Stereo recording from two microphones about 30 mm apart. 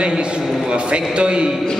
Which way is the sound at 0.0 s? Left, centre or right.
Right.